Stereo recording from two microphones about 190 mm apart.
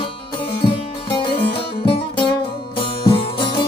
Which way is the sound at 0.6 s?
25° left (ahead or behind).